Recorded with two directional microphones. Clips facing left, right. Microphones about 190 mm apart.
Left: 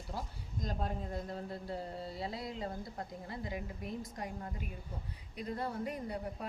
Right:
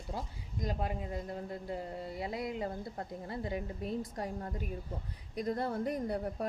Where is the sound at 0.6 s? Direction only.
10° right (ahead or behind).